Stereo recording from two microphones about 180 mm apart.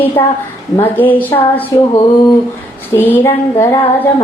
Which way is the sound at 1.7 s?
20° left (ahead or behind).